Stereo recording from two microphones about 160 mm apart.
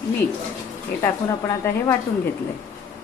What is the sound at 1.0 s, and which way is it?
Speech, 15° left (ahead or behind).